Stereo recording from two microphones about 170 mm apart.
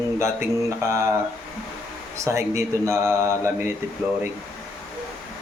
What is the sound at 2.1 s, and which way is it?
Speech, 15° right (ahead or behind).